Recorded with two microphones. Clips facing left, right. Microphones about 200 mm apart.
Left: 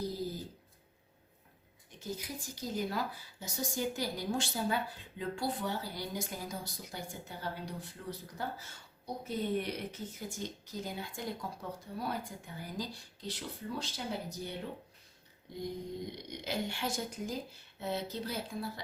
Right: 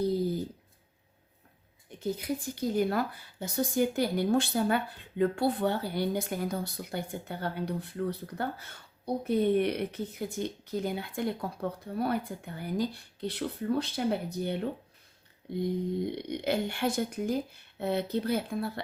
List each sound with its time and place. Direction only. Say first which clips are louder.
2.0 s speech: right 9 dB; 60° right (ahead or behind)